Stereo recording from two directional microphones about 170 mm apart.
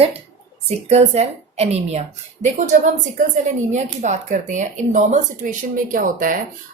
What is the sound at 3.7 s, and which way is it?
Speech, 45° right (ahead or behind).